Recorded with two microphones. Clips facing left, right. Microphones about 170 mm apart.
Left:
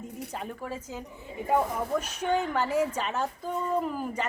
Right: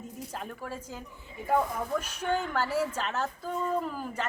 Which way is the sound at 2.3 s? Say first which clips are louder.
Left 3 dB; 10° left (ahead or behind).